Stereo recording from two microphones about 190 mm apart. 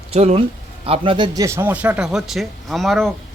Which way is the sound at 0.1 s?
35° right (ahead or behind).